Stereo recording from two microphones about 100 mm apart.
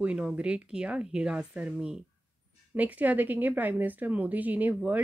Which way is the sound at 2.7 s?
15° right (ahead or behind).